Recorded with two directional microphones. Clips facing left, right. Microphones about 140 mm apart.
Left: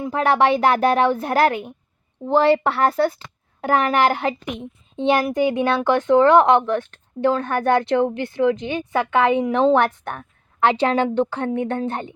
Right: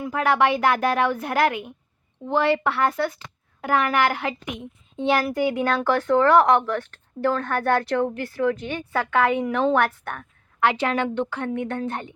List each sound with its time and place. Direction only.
0.0 s speech: 30° left (ahead or behind)
4.9 s speech: 20° left (ahead or behind)